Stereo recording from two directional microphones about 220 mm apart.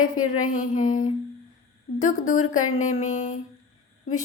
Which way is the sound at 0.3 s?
35° left (ahead or behind).